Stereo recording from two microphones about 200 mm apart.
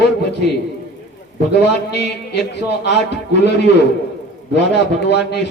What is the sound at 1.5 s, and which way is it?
A man's voice, 60° left (ahead or behind).